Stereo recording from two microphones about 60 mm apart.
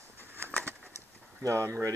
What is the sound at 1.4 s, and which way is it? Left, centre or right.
Speech, right.